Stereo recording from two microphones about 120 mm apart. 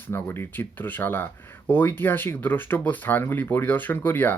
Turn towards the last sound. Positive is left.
turn(degrees=15)  # may be behind; listen again after turning